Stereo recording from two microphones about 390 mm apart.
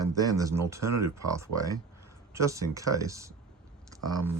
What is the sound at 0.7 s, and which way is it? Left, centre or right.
Speech, centre.